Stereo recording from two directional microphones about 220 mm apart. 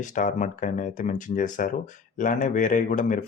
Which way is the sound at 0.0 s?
35° left (ahead or behind).